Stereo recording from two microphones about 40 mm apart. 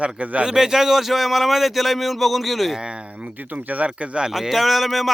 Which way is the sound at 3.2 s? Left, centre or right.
Right.